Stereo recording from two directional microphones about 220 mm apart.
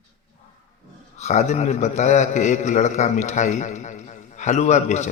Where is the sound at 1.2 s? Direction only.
30° left (ahead or behind).